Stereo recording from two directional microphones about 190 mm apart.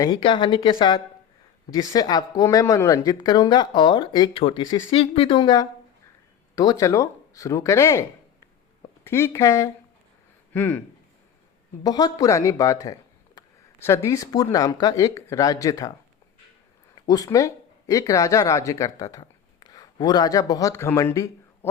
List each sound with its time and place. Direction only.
0.0 s speech: 25° left (ahead or behind); by 10.8 s 10° left (ahead or behind)
11.8 s speech: 20° left (ahead or behind)
17.1 s speech: 20° left (ahead or behind)